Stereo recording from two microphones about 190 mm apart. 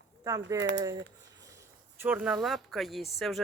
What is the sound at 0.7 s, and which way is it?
Speech, 20° right (ahead or behind).